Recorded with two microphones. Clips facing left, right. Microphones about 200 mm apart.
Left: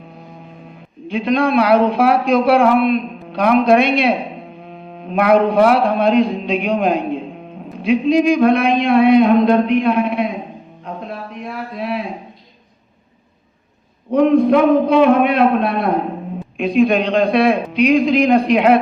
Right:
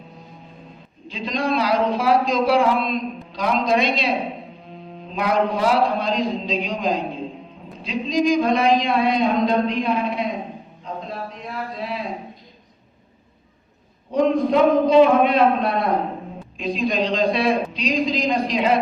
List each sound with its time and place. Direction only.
1.0 s a man's voice: 60° left (ahead or behind)
4.7 s mantra: 60° left (ahead or behind)
7.8 s a man's voice: 60° left (ahead or behind)
11.4 s a sound: 60° left (ahead or behind)
14.1 s a man's voice: 60° left (ahead or behind)